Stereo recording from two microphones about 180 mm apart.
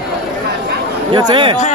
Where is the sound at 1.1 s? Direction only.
25° right (ahead or behind).